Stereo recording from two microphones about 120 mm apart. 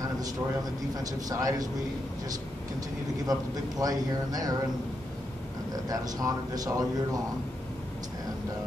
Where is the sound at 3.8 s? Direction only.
30° right (ahead or behind).